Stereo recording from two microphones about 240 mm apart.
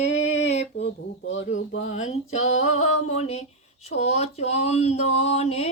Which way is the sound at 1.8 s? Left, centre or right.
Left.